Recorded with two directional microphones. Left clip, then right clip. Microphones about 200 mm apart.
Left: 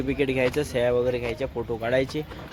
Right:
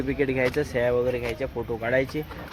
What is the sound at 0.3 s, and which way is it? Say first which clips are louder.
Speech: even; 10° left (ahead or behind).